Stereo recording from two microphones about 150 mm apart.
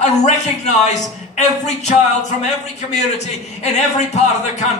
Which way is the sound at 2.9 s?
50° left (ahead or behind).